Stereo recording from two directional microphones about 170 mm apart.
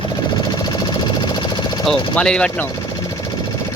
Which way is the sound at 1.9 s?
5° left (ahead or behind).